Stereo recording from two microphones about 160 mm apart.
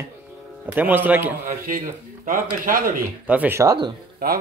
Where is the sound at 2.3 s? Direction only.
60° right (ahead or behind).